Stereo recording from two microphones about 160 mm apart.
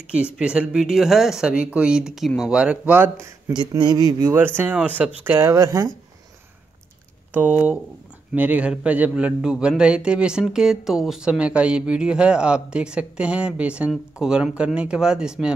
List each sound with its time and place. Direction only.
0.1 s a man's voice: 5° right (ahead or behind)
3.5 s speech: 25° right (ahead or behind)
7.3 s a man's voice: 10° right (ahead or behind)